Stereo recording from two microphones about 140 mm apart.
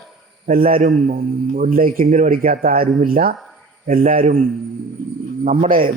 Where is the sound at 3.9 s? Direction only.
75° right (ahead or behind).